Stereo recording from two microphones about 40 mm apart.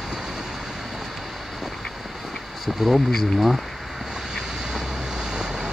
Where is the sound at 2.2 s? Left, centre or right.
Centre.